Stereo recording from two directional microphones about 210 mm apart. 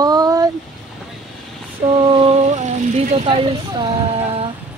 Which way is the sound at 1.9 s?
25° right (ahead or behind).